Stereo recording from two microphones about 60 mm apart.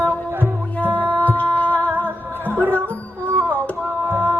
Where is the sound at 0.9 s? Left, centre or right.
Left.